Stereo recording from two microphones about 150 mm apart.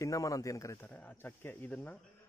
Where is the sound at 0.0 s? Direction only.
20° left (ahead or behind).